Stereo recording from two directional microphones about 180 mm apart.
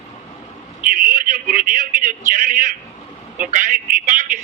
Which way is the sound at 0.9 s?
45° right (ahead or behind).